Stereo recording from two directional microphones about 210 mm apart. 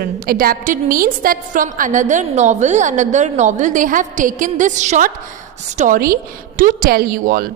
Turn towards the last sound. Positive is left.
turn(degrees=-45)  # may be behind; listen again after turning